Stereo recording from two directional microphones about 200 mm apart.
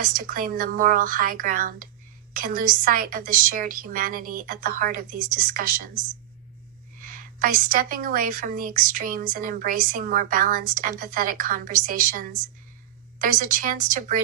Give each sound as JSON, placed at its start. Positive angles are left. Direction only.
{"t": 0.0, "sound": "a woman's voice", "side_deg": -45}
{"t": 7.0, "sound": "a woman's voice", "side_deg": -45}